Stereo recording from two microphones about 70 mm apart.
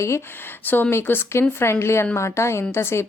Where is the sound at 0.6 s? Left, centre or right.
Left.